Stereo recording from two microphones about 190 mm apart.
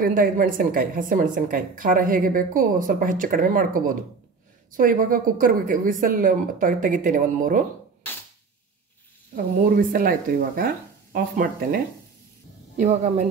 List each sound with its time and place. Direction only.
0.0 s a woman's voice: 45° right (ahead or behind)
9.3 s a woman's voice: 50° right (ahead or behind)
12.7 s speech: 35° right (ahead or behind)